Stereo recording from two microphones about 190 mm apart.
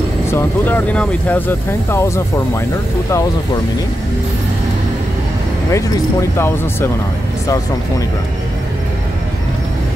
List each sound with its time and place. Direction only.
0.3 s speech: 10° left (ahead or behind)
6.3 s speech: 15° left (ahead or behind)